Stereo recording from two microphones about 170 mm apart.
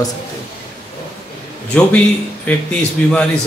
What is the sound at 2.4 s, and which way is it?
Speech, 5° left (ahead or behind).